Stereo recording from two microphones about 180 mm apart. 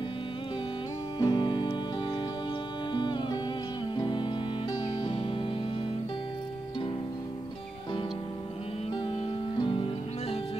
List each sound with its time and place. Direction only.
1.2 s music: 25° left (ahead or behind)
9.6 s music: 25° left (ahead or behind)